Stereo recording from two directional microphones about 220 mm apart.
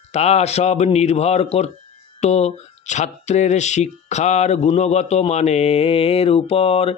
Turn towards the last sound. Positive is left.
turn(degrees=25)  # may be behind; listen again after turning